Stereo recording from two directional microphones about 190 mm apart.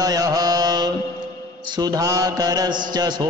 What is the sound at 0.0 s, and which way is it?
Mantra, 20° right (ahead or behind).